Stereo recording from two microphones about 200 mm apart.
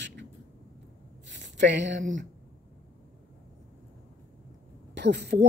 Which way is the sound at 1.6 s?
60° right (ahead or behind).